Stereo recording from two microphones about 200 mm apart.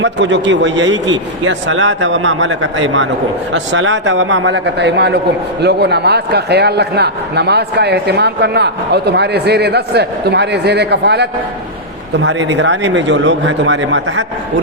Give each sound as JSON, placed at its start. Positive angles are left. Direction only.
{"t": 0.0, "sound": "a man's voice", "side_deg": -65}